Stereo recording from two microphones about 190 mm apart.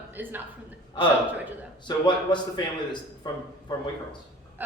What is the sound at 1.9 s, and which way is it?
Speech, 20° left (ahead or behind).